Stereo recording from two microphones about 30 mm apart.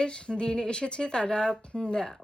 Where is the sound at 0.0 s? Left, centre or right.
Left.